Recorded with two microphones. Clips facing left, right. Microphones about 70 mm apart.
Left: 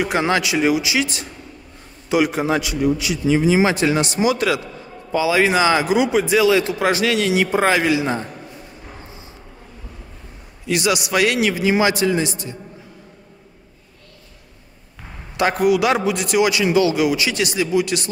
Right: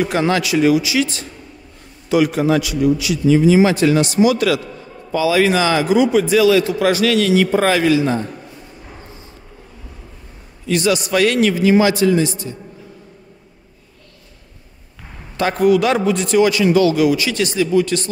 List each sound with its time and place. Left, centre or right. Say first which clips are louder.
0.0 s a man's voice: right 2 dB; centre
10.7 s a man's voice: right 3 dB; centre
15.5 s a man's voice: right 4 dB; centre